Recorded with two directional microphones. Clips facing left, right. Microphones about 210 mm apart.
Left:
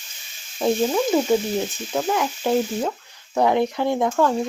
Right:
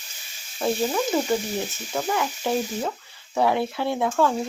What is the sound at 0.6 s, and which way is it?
Speech, 10° left (ahead or behind).